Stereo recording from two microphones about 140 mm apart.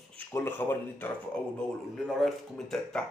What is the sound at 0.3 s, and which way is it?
Speech, 15° left (ahead or behind).